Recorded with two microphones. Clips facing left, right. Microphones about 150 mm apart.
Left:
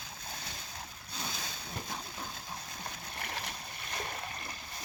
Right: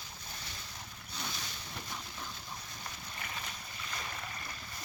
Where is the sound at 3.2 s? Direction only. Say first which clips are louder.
Left 3 dB; 65° left (ahead or behind).